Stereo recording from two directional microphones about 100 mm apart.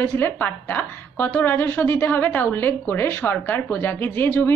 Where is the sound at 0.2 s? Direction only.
20° left (ahead or behind).